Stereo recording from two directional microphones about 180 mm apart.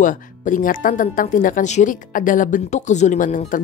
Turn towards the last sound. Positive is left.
turn(degrees=45)  # may be behind; listen again after turning